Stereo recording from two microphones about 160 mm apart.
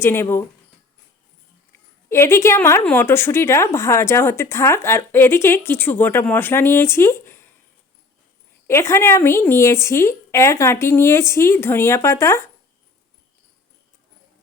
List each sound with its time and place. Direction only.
0.0 s a woman's voice: 15° left (ahead or behind)
1.7 s a woman's voice: 15° left (ahead or behind)
8.6 s a woman's voice: 15° left (ahead or behind)